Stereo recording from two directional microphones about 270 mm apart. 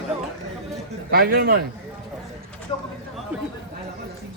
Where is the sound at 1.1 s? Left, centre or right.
Right.